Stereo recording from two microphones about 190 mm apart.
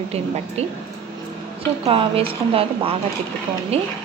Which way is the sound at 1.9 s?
30° right (ahead or behind).